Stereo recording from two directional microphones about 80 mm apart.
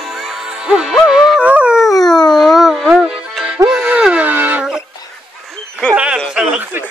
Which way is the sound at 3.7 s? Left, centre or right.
Centre.